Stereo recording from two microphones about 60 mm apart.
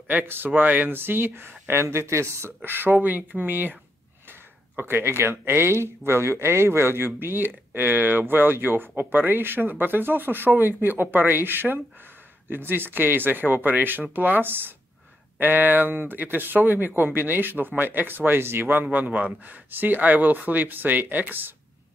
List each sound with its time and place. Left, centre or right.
0.1 s speech: right
2.6 s speech: right